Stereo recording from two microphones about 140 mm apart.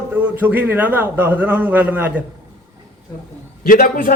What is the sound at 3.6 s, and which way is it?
Speech, 80° left.